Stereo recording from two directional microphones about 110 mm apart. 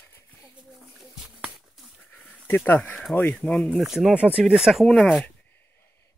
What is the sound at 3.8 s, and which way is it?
Speech, 5° right (ahead or behind).